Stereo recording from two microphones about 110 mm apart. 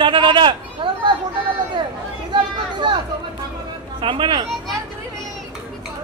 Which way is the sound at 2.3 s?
45° right (ahead or behind).